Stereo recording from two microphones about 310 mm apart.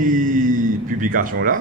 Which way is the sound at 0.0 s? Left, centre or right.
Right.